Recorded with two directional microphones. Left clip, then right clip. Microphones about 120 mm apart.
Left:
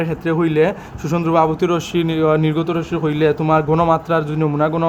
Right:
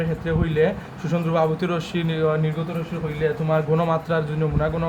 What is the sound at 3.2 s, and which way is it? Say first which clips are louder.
Speech: left 6 dB; 90° left.